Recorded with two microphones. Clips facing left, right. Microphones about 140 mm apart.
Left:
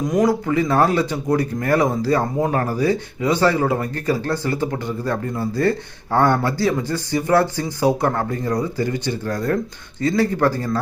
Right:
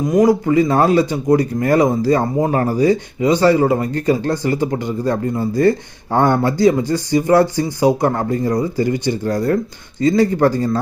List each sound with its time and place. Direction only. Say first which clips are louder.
0.1 s speech: right 6 dB; 5° right (ahead or behind)